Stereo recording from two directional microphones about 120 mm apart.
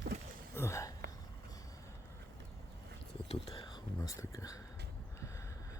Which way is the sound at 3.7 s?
35° left (ahead or behind).